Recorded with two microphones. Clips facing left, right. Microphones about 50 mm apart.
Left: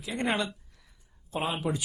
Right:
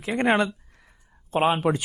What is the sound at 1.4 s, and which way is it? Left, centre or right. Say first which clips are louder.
Speech: right 9 dB; right.